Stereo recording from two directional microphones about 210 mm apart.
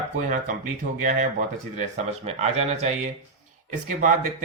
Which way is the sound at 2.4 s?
30° right (ahead or behind).